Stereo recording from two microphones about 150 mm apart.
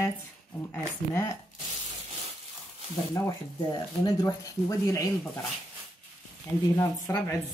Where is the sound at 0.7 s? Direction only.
20° left (ahead or behind).